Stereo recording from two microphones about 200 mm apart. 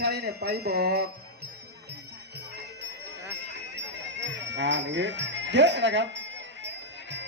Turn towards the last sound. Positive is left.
turn(degrees=-60)  # may be behind; listen again after turning